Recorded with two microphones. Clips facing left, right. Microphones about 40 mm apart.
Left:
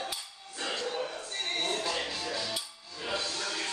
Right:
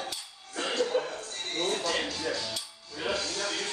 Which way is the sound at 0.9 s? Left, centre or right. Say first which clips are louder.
Right 6 dB; right.